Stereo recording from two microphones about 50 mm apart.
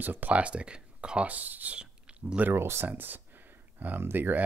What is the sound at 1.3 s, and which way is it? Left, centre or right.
Speech, right.